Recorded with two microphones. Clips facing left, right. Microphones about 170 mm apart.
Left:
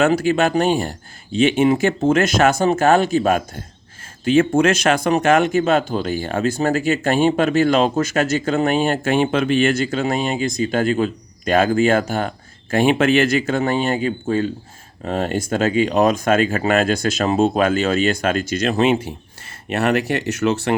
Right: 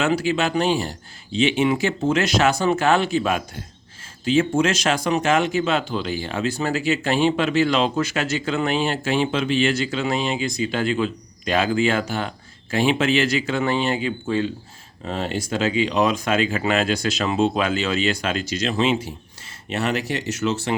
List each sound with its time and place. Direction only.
0.0 s speech: 50° left (ahead or behind)
4.2 s speech: 55° left (ahead or behind)